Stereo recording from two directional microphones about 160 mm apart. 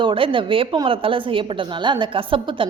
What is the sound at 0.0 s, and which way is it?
A woman's voice, 30° right (ahead or behind).